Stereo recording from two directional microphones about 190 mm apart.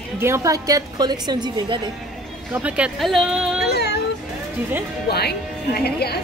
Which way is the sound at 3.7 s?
60° left (ahead or behind).